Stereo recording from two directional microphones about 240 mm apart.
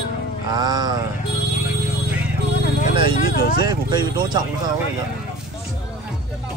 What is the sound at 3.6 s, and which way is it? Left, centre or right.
Speech, centre.